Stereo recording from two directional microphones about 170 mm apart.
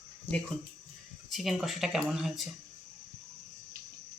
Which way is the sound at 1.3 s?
Centre (ahead or behind).